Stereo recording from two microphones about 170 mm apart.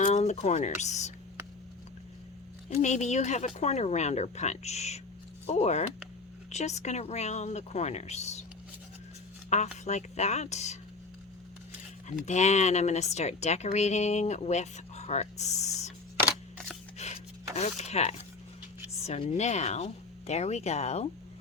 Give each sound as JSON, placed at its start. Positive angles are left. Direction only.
{"t": 0.0, "sound": "speech", "side_deg": 45}
{"t": 2.6, "sound": "speech", "side_deg": 45}
{"t": 9.5, "sound": "speech", "side_deg": 45}
{"t": 12.0, "sound": "speech", "side_deg": 45}
{"t": 17.0, "sound": "rub", "side_deg": 40}
{"t": 17.6, "sound": "speech", "side_deg": 40}